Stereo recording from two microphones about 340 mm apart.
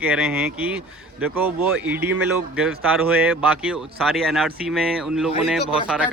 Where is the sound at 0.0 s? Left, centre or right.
Centre.